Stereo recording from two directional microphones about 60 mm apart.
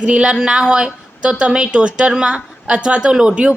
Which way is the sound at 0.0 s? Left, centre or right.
Centre.